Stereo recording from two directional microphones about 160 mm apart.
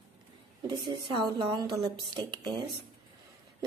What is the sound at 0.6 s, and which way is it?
A woman's voice, 25° right (ahead or behind).